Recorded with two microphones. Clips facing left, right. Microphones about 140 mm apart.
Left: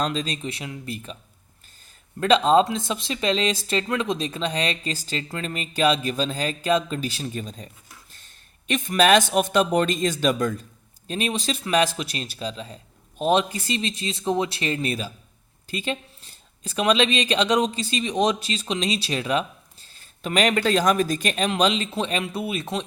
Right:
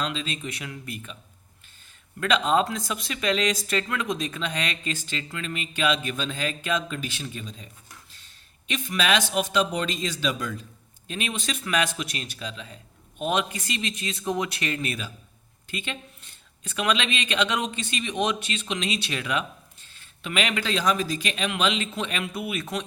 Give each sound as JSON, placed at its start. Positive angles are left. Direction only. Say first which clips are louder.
{"t": 0.0, "sound": "speech", "louder": "left 4 dB", "side_deg": 40}
{"t": 2.2, "sound": "speech", "louder": "left 5 dB", "side_deg": 30}
{"t": 11.1, "sound": "speech", "louder": "left 5 dB", "side_deg": 35}